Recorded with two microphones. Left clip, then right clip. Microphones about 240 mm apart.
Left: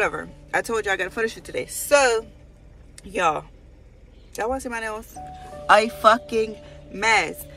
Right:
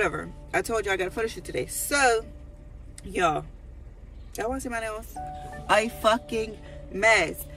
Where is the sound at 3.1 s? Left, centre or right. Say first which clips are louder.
Left 3 dB; centre.